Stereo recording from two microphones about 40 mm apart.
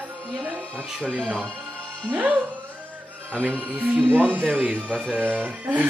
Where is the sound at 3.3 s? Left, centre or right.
Right.